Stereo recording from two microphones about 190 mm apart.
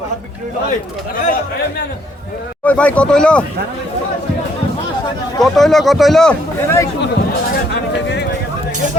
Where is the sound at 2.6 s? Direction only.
5° left (ahead or behind).